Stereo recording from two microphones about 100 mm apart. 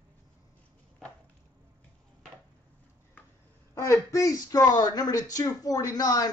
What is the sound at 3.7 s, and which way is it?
Speech, 25° left (ahead or behind).